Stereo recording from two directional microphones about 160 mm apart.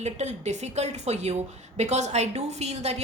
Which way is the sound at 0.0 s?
45° right (ahead or behind).